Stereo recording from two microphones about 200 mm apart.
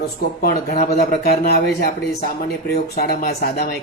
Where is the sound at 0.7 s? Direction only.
50° left (ahead or behind).